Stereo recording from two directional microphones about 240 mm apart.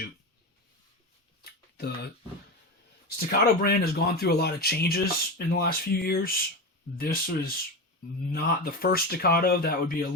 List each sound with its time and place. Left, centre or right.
1.7 s speech: left
3.2 s speech: left